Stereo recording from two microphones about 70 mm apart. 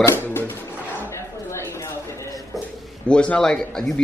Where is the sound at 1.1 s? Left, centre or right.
Left.